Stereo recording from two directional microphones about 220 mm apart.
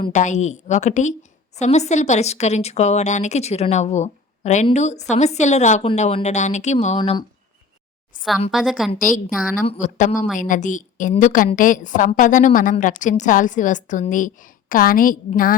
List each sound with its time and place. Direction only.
0.0 s a woman's voice: 35° left (ahead or behind)
8.4 s a woman's voice: centre (ahead or behind)
9.6 s a woman's voice: 30° left (ahead or behind)